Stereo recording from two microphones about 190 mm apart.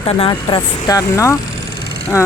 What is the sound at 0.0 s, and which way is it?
Speech, 30° left (ahead or behind).